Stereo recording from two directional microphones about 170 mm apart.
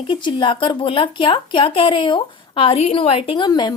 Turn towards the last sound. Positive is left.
turn(degrees=25)  # may be behind; listen again after turning